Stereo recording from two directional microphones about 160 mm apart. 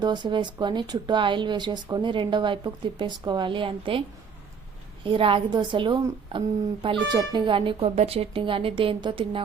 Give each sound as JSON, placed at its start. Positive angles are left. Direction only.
{"t": 0.0, "sound": "speech", "side_deg": -25}
{"t": 5.0, "sound": "speech", "side_deg": -35}